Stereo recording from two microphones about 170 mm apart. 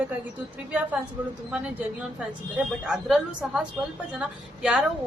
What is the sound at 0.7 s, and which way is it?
Speech, 10° right (ahead or behind).